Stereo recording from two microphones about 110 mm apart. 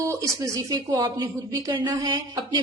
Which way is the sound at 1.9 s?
45° right (ahead or behind).